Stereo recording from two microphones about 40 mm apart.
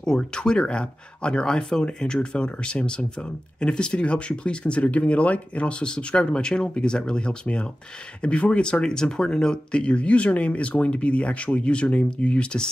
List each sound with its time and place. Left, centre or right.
0.0 s speech: centre